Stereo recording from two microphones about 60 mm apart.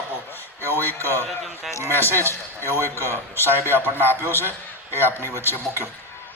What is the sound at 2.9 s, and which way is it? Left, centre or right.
A man's voice, left.